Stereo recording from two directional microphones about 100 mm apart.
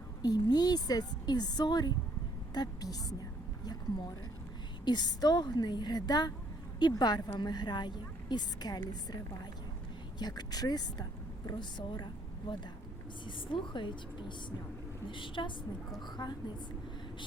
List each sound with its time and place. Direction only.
0.2 s a woman's voice: 40° left (ahead or behind)
10.2 s a woman's voice: 45° left (ahead or behind)